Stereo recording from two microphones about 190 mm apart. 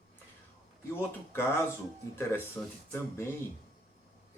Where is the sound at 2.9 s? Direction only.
15° left (ahead or behind).